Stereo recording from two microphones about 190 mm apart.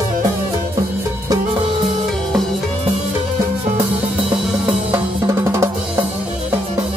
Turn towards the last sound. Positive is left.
turn(degrees=-15)  # may be behind; listen again after turning